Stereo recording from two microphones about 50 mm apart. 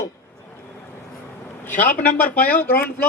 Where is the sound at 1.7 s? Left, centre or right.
Left.